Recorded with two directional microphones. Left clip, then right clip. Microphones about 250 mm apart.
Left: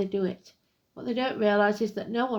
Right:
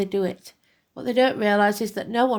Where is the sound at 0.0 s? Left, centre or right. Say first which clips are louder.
Right 4 dB; right.